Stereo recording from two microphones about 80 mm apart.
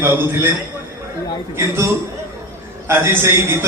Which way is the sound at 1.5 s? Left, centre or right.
Right.